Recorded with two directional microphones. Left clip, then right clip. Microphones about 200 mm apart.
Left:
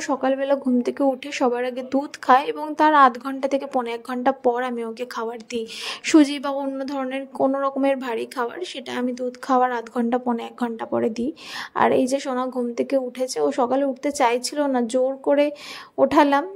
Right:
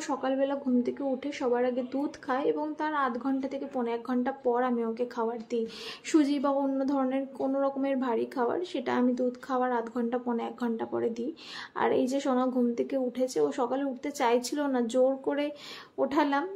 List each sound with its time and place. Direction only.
0.0 s speech: 30° left (ahead or behind)